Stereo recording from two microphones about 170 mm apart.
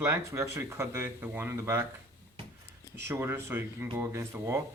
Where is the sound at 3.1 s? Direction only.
15° right (ahead or behind).